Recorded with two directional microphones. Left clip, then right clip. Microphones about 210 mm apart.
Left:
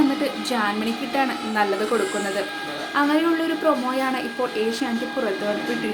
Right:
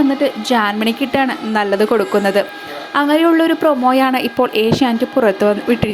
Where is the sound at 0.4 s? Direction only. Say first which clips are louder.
Right 8 dB; 35° right (ahead or behind).